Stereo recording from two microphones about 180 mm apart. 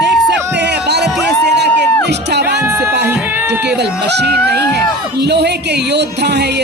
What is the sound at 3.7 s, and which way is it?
Speech, 70° right (ahead or behind).